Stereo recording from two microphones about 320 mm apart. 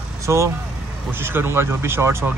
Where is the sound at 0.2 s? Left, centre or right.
Centre.